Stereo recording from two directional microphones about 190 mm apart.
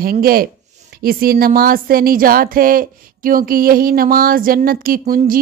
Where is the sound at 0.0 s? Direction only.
50° right (ahead or behind).